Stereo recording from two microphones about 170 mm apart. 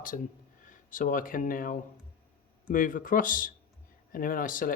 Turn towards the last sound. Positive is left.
turn(degrees=55)  # may be behind; listen again after turning